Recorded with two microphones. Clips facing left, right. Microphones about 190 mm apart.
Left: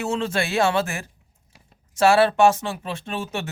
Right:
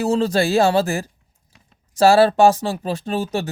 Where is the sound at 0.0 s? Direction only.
35° right (ahead or behind).